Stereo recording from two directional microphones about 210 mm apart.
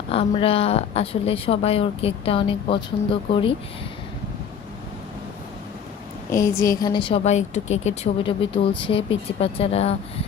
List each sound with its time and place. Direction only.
0.1 s a woman's voice: 25° left (ahead or behind)
6.3 s a woman's voice: 15° left (ahead or behind)